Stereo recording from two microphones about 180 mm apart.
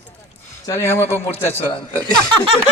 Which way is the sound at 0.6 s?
15° left (ahead or behind).